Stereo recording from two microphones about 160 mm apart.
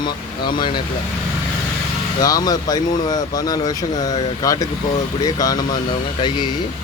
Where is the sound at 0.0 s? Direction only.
30° left (ahead or behind).